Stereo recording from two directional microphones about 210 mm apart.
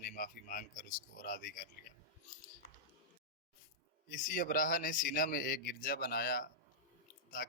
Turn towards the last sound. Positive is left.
turn(degrees=45)  # may be behind; listen again after turning